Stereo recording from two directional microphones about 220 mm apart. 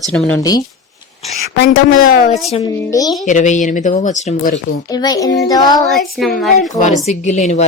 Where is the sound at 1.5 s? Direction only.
45° left (ahead or behind).